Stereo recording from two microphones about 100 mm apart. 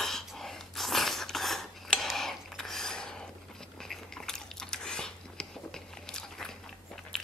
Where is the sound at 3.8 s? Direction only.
5° left (ahead or behind).